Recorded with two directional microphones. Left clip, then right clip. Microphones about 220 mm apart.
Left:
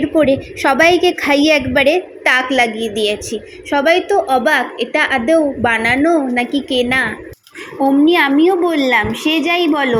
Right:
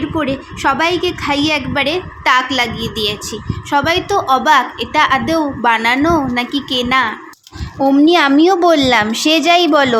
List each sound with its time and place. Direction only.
0.2 s a woman's voice: 5° left (ahead or behind); by 10.0 s 15° right (ahead or behind)